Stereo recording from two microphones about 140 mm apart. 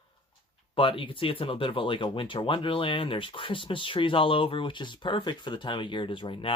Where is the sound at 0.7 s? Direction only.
40° left (ahead or behind).